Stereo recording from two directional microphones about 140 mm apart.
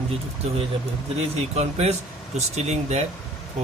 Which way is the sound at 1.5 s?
50° right (ahead or behind).